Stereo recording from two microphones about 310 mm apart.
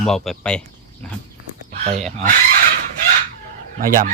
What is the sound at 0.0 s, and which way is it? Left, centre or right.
Speech, centre.